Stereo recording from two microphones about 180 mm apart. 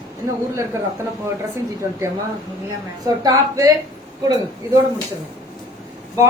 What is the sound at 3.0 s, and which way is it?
Speech, 20° right (ahead or behind).